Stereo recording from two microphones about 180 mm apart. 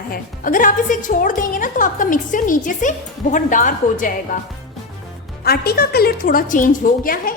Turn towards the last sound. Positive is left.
turn(degrees=50)  # may be behind; listen again after turning